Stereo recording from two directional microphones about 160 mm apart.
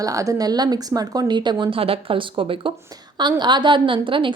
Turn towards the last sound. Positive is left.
turn(degrees=-30)  # may be behind; listen again after turning